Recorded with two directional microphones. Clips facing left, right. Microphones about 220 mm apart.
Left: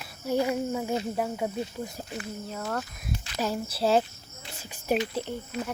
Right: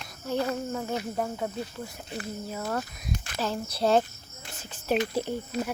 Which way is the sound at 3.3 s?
10° left (ahead or behind).